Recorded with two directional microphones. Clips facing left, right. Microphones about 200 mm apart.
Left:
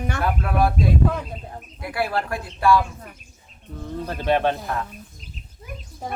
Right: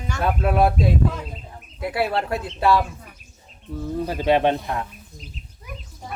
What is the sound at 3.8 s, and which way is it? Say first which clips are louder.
Speech: right 4 dB; 10° right (ahead or behind).